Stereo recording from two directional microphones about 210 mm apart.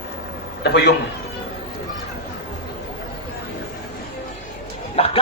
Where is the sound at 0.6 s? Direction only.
55° left (ahead or behind).